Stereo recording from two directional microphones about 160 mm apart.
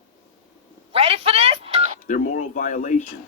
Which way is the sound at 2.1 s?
60° left (ahead or behind).